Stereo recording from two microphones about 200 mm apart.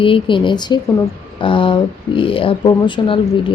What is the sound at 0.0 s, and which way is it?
Speech, 25° left (ahead or behind).